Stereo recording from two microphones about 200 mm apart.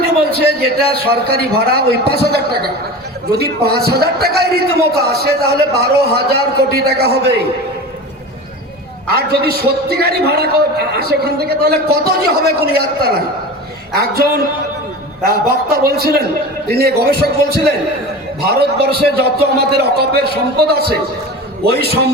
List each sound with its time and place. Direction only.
0.0 s a sound: 50° right (ahead or behind)
0.9 s a man's voice: 50° right (ahead or behind)
9.0 s a man's voice: 50° right (ahead or behind)